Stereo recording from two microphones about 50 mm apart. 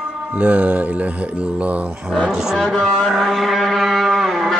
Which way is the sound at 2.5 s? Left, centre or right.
Centre.